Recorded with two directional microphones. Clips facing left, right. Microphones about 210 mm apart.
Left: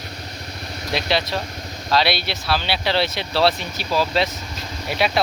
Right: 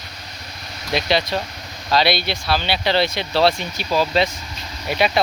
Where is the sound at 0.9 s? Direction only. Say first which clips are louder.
Right 2 dB; centre (ahead or behind).